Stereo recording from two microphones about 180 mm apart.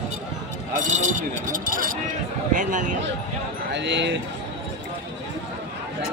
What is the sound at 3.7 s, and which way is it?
Speech, 80° right.